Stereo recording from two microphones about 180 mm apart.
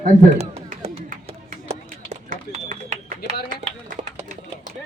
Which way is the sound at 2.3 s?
45° right (ahead or behind).